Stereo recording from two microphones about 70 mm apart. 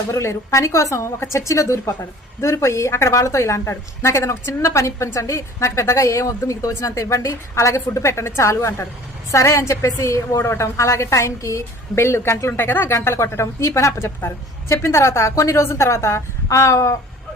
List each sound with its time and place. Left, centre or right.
0.1 s a woman's voice: left